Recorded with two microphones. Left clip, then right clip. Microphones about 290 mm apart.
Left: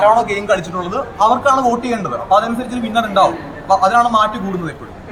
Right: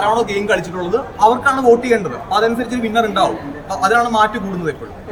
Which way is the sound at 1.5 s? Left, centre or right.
Right.